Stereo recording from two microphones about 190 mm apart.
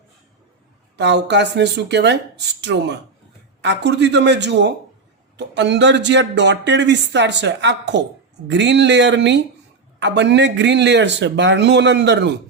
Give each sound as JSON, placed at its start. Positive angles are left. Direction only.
{"t": 0.9, "sound": "speech", "side_deg": -65}